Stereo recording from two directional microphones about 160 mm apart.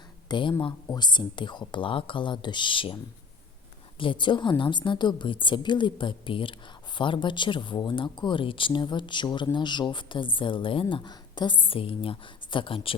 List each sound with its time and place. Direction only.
0.3 s a woman's voice: 30° left (ahead or behind)